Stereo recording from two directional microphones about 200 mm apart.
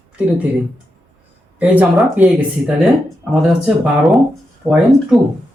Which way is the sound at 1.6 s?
5° right (ahead or behind).